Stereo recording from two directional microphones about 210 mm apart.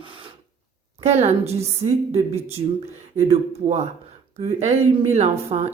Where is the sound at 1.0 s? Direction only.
30° right (ahead or behind).